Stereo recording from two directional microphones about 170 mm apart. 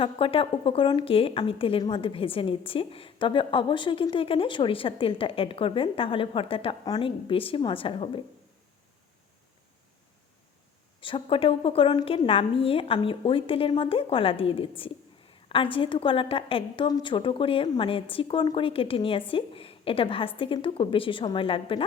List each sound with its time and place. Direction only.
0.0 s a woman's voice: 30° left (ahead or behind)
11.0 s a woman's voice: 30° left (ahead or behind)